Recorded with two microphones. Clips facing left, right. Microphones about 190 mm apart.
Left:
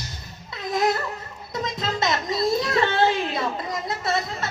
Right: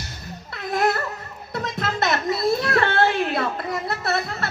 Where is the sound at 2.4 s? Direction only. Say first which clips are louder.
Right 1 dB; 60° right (ahead or behind).